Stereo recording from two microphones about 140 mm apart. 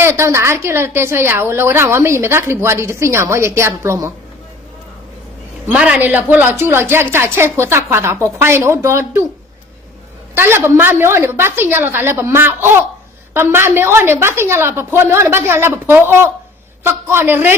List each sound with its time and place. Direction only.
0.0 s a woman's voice: 20° right (ahead or behind)
5.6 s a woman's voice: 10° right (ahead or behind)
10.3 s a woman's voice: 15° right (ahead or behind)